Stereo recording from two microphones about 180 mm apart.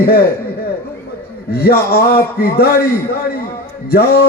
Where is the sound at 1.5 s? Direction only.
60° left (ahead or behind).